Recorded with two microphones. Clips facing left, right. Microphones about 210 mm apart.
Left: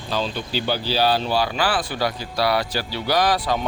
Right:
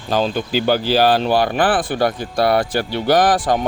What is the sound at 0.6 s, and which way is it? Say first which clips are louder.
Speech: right 6 dB; 50° right (ahead or behind).